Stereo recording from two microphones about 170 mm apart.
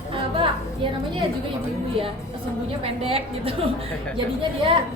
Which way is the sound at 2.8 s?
35° right (ahead or behind).